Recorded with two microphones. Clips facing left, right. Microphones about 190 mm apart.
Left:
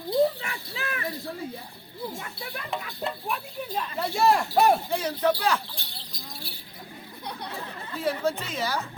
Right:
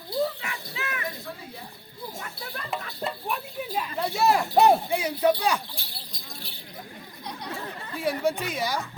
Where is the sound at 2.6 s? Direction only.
Centre (ahead or behind).